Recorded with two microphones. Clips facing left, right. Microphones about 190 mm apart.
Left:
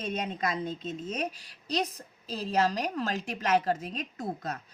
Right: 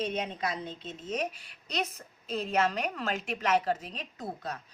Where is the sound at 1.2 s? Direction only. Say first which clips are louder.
Even; 35° left (ahead or behind).